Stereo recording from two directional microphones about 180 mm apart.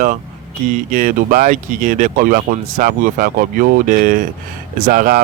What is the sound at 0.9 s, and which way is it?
Speech, 45° right (ahead or behind).